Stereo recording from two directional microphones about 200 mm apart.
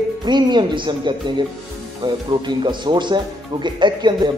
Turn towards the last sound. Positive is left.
turn(degrees=-20)  # may be behind; listen again after turning